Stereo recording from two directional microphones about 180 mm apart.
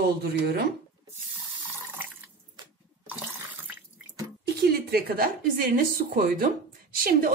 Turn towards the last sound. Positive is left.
turn(degrees=-55)  # may be behind; listen again after turning